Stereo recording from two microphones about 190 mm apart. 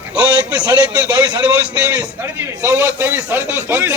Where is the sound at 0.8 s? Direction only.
5° right (ahead or behind).